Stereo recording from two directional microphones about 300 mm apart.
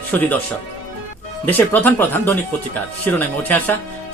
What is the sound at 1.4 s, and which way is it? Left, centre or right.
A man's voice, centre.